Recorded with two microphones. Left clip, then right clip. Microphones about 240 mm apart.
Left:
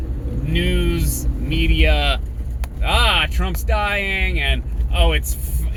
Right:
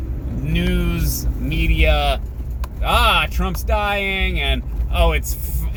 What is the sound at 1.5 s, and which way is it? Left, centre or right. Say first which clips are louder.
Speech: even; centre.